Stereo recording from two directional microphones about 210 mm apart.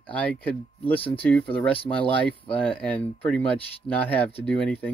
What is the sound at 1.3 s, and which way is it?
Speech, 5° left (ahead or behind).